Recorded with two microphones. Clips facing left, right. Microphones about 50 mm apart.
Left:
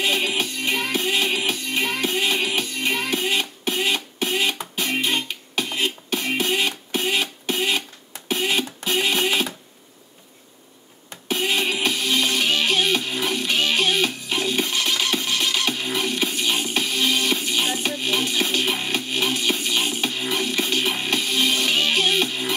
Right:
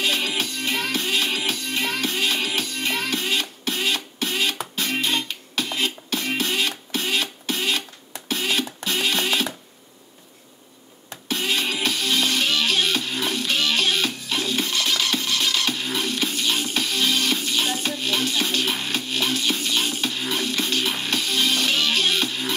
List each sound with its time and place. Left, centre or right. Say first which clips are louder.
0.0 s music: left 2 dB; left
11.2 s music: left 2 dB; left